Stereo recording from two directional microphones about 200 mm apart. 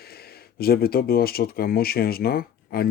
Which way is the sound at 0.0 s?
50° left (ahead or behind).